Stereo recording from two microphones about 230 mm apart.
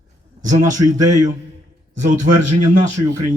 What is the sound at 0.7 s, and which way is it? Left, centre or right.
Speech, right.